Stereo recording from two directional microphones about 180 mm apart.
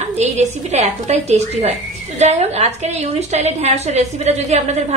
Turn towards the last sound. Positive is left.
turn(degrees=-40)  # may be behind; listen again after turning